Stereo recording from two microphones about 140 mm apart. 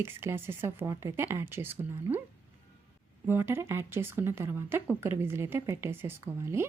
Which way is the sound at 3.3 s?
15° right (ahead or behind).